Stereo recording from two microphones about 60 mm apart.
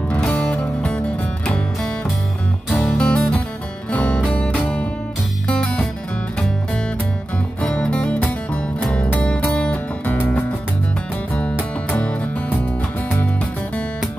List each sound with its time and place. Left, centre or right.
0.3 s music: left
2.7 s music: left
3.0 s music: centre
7.6 s music: centre
10.0 s music: left
11.9 s music: left